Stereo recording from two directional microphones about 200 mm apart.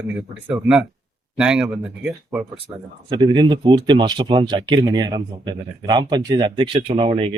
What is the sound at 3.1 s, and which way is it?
Speech, 20° right (ahead or behind).